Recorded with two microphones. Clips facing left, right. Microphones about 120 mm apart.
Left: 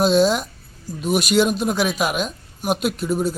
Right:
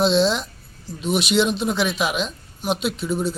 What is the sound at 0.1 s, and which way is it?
Speech, 45° left (ahead or behind).